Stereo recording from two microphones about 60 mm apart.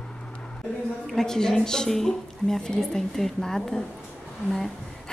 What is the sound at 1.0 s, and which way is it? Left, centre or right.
A woman's voice, centre.